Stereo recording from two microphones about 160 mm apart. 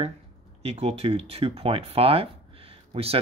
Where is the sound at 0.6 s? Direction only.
40° right (ahead or behind).